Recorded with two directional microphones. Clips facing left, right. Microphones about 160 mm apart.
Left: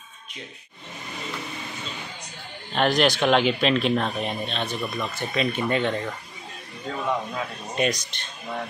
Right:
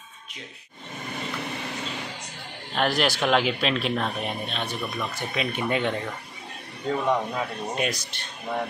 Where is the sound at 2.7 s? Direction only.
5° right (ahead or behind).